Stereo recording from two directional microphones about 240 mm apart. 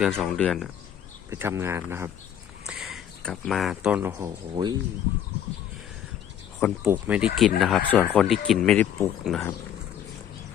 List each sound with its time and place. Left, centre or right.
0.0 s speech: centre
1.3 s speech: centre
4.5 s speech: centre
6.6 s speech: centre